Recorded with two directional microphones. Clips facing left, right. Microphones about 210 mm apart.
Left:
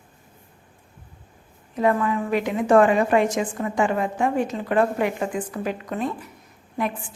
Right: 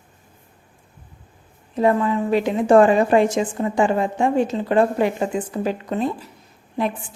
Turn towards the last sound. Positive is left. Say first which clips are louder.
# right 3 dB
turn(degrees=-30)  # may be behind; listen again after turning